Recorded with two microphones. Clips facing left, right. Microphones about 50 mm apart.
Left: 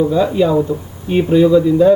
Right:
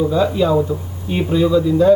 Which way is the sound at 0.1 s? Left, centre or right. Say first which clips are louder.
Left 2 dB; centre.